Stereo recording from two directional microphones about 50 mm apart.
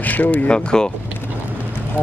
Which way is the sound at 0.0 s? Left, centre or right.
Left.